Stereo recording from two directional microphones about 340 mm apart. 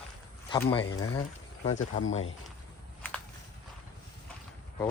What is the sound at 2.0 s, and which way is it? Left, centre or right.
Speech, left.